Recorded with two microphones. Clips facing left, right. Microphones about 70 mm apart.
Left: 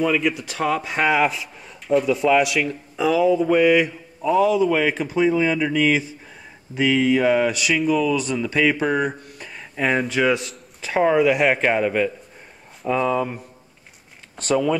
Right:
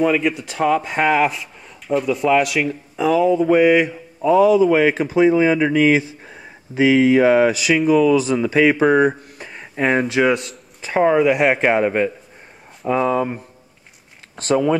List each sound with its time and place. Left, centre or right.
0.0 s speech: centre
4.6 s speech: centre
5.6 s a man's voice: right
5.9 s speech: centre
7.5 s speech: centre
11.6 s a man's voice: centre
12.8 s speech: centre